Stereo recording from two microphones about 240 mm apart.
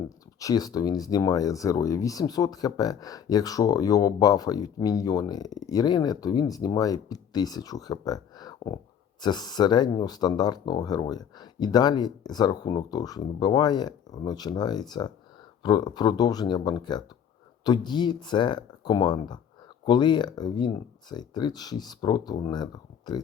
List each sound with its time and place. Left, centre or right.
0.3 s speech: centre